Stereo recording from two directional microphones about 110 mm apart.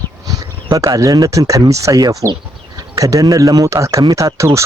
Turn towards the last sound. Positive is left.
turn(degrees=-25)  # may be behind; listen again after turning